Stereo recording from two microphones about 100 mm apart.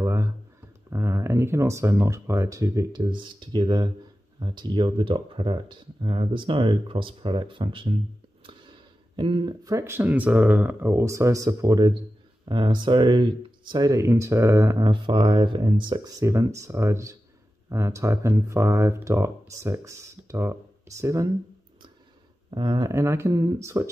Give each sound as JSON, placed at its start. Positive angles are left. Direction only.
{"t": 0.0, "sound": "a sound", "side_deg": -30}
{"t": 0.8, "sound": "speech", "side_deg": -30}
{"t": 2.9, "sound": "speech", "side_deg": -50}
{"t": 9.1, "sound": "speech", "side_deg": -50}
{"t": 9.8, "sound": "speech", "side_deg": -25}
{"t": 12.4, "sound": "speech", "side_deg": -50}
{"t": 14.8, "sound": "speech", "side_deg": -55}
{"t": 16.2, "sound": "speech", "side_deg": -30}
{"t": 22.5, "sound": "speech", "side_deg": -45}